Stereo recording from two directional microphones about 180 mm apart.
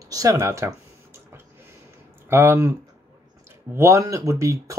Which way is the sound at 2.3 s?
15° right (ahead or behind).